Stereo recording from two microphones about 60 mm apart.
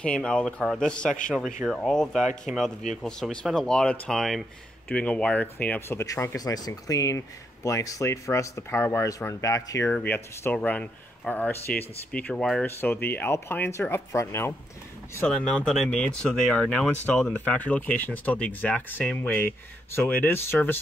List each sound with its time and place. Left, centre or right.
0.0 s speech: centre
1.3 s speech: centre
4.9 s speech: centre
5.8 s speech: left
6.3 s speech: left
9.3 s speech: left
10.0 s speech: left
10.5 s speech: left
12.6 s speech: left
13.7 s speech: left
15.3 s speech: centre; by 20.8 s left